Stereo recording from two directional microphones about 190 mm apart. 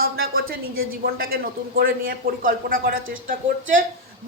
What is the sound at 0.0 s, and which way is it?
Speech, 50° right (ahead or behind).